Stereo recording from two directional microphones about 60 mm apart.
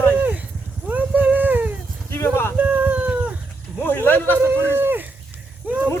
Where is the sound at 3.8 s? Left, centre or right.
Left.